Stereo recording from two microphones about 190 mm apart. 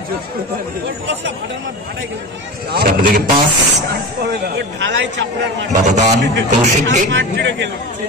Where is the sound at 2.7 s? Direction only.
50° right (ahead or behind).